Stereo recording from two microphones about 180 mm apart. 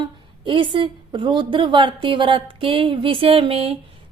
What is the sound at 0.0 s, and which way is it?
A woman's voice, 25° right (ahead or behind).